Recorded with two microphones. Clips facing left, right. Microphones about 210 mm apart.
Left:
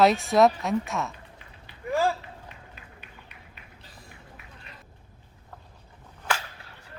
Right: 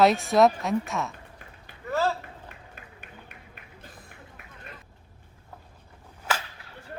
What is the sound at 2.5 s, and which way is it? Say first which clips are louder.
Music: right 1 dB; 50° right (ahead or behind).